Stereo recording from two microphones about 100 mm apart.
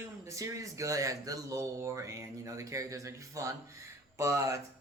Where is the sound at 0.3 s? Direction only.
35° right (ahead or behind).